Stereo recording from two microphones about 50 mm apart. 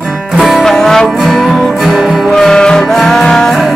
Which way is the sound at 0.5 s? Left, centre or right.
Centre.